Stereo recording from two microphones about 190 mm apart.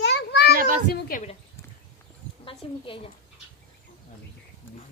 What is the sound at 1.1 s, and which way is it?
Speech, 50° left (ahead or behind).